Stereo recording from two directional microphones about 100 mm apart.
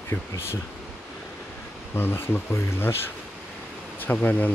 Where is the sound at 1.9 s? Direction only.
20° left (ahead or behind).